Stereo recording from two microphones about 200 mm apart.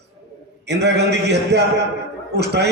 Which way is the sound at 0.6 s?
55° right (ahead or behind).